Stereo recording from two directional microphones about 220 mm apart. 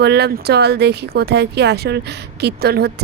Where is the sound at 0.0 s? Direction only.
50° right (ahead or behind).